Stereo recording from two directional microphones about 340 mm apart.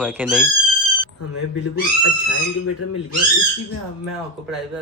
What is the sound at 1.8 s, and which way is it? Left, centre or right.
Speech, left.